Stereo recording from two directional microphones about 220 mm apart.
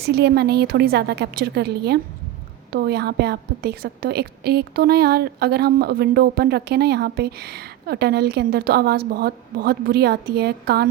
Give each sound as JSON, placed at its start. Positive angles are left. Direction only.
{"t": 0.0, "sound": "a woman's voice", "side_deg": -50}